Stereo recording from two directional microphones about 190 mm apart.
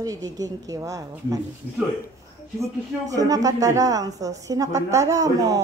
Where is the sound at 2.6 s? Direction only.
20° right (ahead or behind).